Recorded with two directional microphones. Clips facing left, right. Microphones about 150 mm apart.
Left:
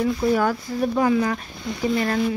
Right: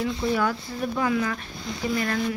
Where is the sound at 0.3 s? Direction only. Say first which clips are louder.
Left 4 dB; 45° left (ahead or behind).